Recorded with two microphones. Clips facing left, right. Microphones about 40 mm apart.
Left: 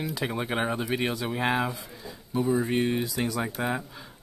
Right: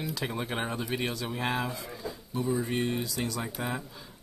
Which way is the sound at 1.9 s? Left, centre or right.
Centre.